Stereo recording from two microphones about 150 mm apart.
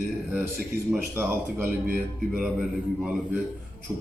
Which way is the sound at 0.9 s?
10° right (ahead or behind).